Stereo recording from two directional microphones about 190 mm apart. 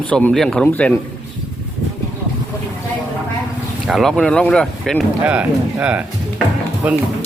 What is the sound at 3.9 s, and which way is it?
Speech, centre (ahead or behind).